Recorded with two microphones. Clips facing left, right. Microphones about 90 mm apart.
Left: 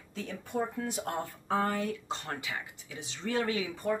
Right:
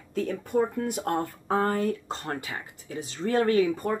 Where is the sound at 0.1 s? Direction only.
50° right (ahead or behind).